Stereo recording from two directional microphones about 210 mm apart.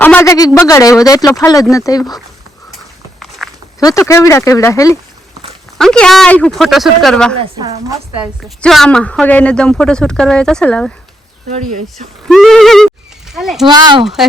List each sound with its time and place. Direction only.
0.0 s speech: 10° left (ahead or behind)
3.2 s walk: centre (ahead or behind)
3.8 s speech: 15° left (ahead or behind)
5.7 s a woman's voice: 5° left (ahead or behind)
7.3 s speech: 25° right (ahead or behind)
8.2 s a woman's voice: centre (ahead or behind)
12.3 s a woman's voice: centre (ahead or behind)
13.7 s speech: 20° right (ahead or behind)
14.0 s a woman's voice: centre (ahead or behind)